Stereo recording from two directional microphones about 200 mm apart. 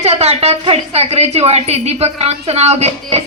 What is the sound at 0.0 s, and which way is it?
A woman's voice, 30° right (ahead or behind).